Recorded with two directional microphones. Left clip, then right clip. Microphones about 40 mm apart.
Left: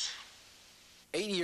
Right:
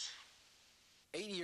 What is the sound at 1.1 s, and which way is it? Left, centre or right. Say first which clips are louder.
Speech: left 10 dB; left.